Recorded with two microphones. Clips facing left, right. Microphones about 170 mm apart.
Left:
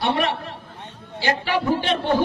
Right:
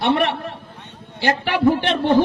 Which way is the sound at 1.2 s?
60° right (ahead or behind).